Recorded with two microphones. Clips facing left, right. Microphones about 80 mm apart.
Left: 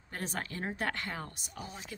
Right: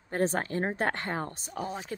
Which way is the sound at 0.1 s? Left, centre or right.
Right.